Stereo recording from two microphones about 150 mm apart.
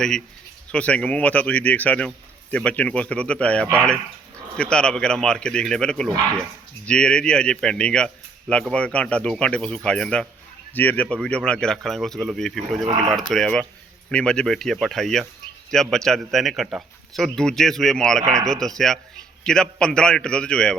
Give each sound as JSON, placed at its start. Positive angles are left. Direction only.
{"t": 0.7, "sound": "speech", "side_deg": 10}
{"t": 12.8, "sound": "speech", "side_deg": -25}
{"t": 13.1, "sound": "speech", "side_deg": 0}